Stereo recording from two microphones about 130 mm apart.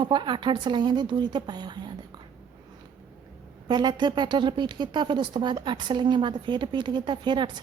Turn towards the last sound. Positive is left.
turn(degrees=-35)  # may be behind; listen again after turning